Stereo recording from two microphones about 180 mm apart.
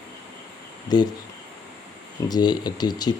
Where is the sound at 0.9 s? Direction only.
20° left (ahead or behind).